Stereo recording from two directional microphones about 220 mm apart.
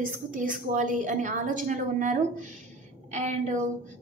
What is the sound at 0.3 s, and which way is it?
A woman's voice, 35° right (ahead or behind).